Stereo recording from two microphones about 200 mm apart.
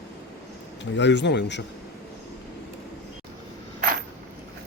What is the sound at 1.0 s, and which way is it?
Speech, 60° left (ahead or behind).